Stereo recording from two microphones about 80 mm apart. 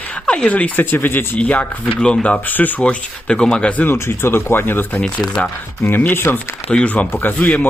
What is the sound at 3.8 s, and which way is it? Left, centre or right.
Speech, left.